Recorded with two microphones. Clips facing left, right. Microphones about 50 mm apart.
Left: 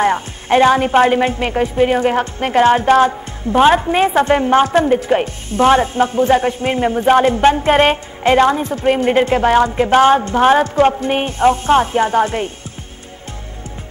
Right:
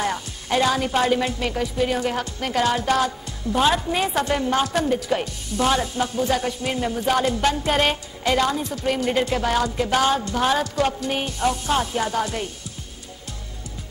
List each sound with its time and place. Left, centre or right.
0.0 s a woman's voice: left